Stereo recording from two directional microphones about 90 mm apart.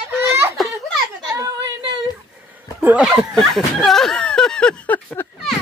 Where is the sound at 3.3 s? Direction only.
5° left (ahead or behind); by 5.3 s 20° left (ahead or behind).